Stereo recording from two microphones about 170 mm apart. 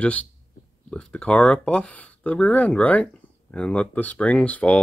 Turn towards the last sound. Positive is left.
turn(degrees=10)  # may be behind; listen again after turning